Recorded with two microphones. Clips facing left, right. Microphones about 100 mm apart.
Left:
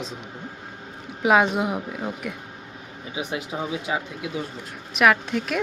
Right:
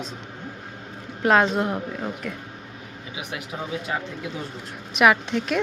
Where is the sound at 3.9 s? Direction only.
10° left (ahead or behind).